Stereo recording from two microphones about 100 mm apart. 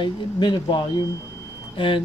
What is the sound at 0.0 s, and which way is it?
Speech, 50° left (ahead or behind).